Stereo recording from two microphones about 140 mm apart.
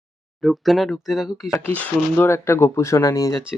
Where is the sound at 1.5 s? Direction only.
10° left (ahead or behind).